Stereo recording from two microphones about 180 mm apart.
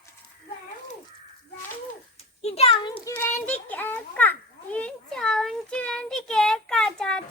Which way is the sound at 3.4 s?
10° left (ahead or behind).